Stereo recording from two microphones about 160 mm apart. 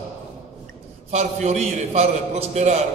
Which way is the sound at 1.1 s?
45° right (ahead or behind).